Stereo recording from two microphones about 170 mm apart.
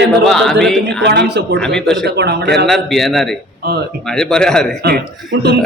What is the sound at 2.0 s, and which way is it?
Speech, 80° right.